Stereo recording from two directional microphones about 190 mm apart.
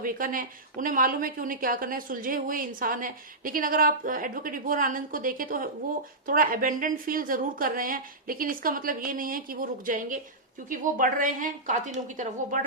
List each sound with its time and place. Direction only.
0.0 s a woman's voice: 45° right (ahead or behind)